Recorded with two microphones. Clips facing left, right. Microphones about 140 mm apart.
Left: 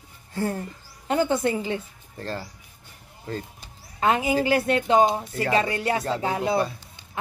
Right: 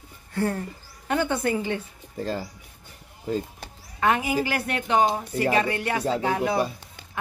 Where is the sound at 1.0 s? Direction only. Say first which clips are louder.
Left 2 dB; 30° left (ahead or behind).